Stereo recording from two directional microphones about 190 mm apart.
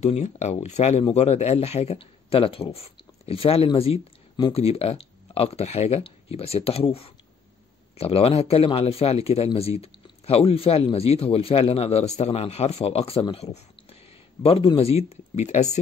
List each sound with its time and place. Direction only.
0.0 s speech: 35° left (ahead or behind)